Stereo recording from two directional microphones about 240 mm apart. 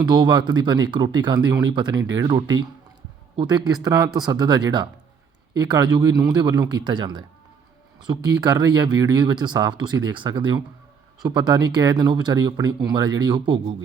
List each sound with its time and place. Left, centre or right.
0.0 s speech: centre